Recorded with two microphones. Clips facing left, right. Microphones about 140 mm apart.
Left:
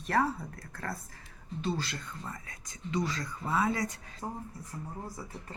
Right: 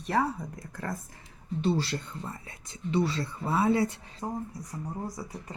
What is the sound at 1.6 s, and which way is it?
Speech, 30° right (ahead or behind).